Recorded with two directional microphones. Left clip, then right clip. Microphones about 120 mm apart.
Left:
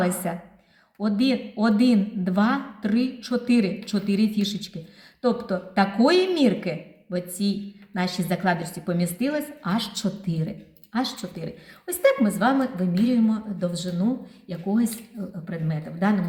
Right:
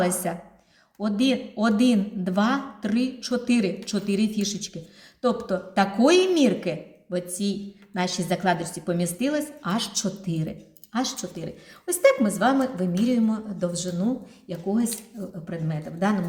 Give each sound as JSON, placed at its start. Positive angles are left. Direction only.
{"t": 0.2, "sound": "a woman's voice", "side_deg": -15}
{"t": 5.2, "sound": "a woman's voice", "side_deg": -20}
{"t": 14.4, "sound": "speech", "side_deg": -10}